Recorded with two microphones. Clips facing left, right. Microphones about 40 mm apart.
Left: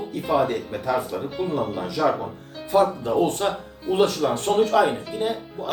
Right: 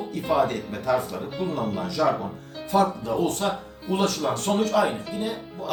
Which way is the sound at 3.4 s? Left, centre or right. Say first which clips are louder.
Left 2 dB; left.